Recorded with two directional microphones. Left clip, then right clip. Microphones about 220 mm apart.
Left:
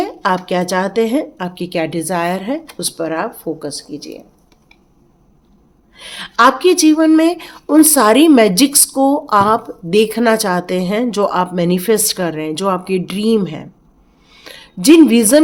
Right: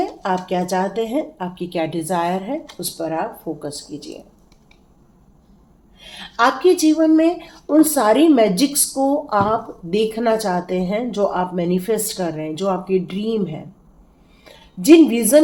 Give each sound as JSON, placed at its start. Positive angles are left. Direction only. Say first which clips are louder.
{"t": 0.2, "sound": "speech", "louder": "left 5 dB", "side_deg": 50}
{"t": 2.8, "sound": "speech", "louder": "left 4 dB", "side_deg": 50}
{"t": 3.6, "sound": "speech", "louder": "left 4 dB", "side_deg": 30}
{"t": 6.1, "sound": "a woman's voice", "louder": "left 6 dB", "side_deg": 50}